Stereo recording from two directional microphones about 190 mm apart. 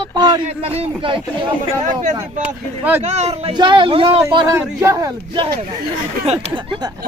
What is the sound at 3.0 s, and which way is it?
Speech, 35° right (ahead or behind).